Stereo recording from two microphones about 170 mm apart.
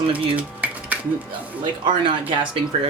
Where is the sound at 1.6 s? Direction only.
30° right (ahead or behind).